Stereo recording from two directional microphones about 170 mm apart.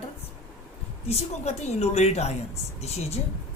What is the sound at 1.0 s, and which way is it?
A man's voice, 40° left (ahead or behind).